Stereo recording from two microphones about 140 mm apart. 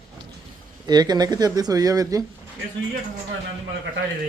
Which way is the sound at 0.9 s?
30° right (ahead or behind).